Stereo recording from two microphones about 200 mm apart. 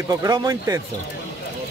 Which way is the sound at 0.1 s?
20° right (ahead or behind).